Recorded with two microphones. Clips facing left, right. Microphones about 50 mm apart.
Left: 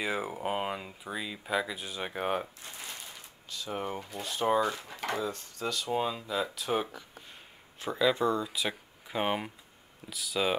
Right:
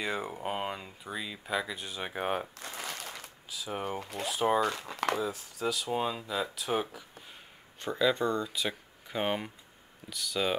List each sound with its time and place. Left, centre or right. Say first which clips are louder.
0.0 s speech: left 1 dB; centre
2.6 s a sound: right 4 dB; right
3.4 s speech: even; centre
4.0 s speech: right 3 dB; right
4.3 s speech: even; centre
4.6 s speech: even; right
5.1 s speech: right 1 dB; centre